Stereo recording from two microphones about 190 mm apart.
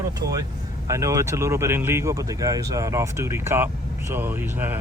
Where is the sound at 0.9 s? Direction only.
15° right (ahead or behind).